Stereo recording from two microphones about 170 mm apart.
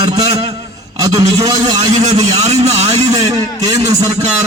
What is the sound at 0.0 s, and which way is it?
A man's voice, 20° right (ahead or behind).